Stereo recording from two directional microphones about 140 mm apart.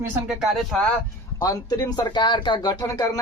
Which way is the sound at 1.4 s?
25° left (ahead or behind).